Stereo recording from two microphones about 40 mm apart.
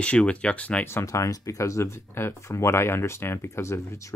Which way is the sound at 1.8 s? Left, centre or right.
Left.